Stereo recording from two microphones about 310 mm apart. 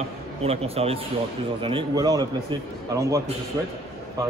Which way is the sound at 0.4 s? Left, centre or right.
Centre.